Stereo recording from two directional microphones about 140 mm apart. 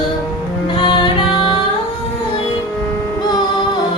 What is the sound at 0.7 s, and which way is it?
Music, 35° left (ahead or behind).